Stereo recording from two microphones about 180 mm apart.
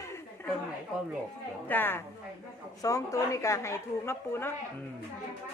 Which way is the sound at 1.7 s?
10° left (ahead or behind).